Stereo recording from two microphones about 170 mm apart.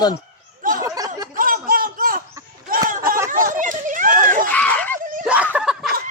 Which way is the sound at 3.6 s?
50° right (ahead or behind).